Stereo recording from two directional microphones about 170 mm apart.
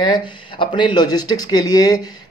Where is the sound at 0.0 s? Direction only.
25° left (ahead or behind).